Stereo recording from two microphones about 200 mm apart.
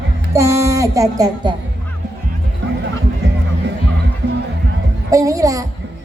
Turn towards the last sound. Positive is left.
turn(degrees=-15)  # may be behind; listen again after turning